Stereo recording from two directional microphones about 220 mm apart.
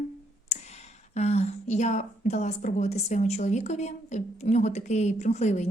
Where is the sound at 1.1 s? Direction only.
30° left (ahead or behind).